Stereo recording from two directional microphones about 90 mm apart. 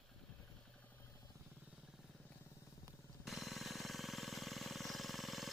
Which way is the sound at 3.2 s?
Centre (ahead or behind).